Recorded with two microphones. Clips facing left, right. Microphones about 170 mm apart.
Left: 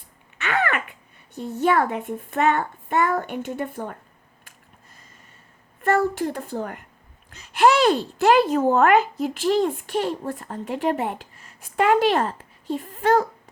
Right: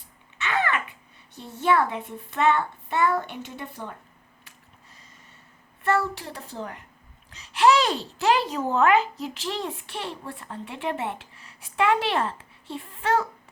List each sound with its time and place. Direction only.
0.4 s a sound: 60° left (ahead or behind)
1.4 s speech: 45° left (ahead or behind)
5.8 s speech: 50° left (ahead or behind)